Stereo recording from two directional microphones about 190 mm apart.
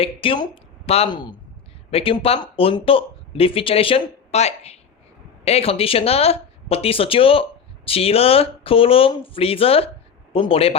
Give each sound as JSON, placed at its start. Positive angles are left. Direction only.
{"t": 0.0, "sound": "a woman's voice", "side_deg": 30}